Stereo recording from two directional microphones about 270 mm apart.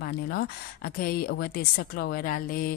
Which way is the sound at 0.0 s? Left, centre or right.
Left.